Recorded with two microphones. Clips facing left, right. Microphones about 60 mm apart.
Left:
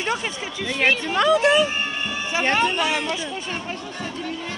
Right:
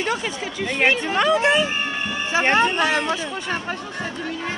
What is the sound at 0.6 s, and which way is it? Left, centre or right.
Speech, right.